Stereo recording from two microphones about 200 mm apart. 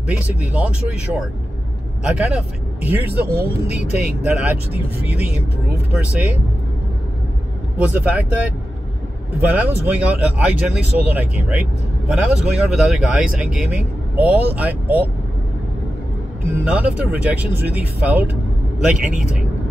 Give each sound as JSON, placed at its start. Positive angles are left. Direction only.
{"t": 0.0, "sound": "speech", "side_deg": -5}
{"t": 3.6, "sound": "speech", "side_deg": 35}
{"t": 4.0, "sound": "speech", "side_deg": -5}
{"t": 7.8, "sound": "speech", "side_deg": -5}
{"t": 16.5, "sound": "speech", "side_deg": -5}